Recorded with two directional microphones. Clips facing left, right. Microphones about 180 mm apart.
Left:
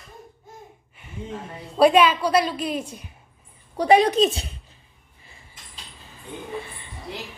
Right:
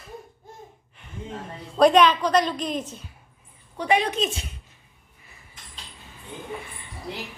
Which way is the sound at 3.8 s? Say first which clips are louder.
Left 6 dB; 35° left (ahead or behind).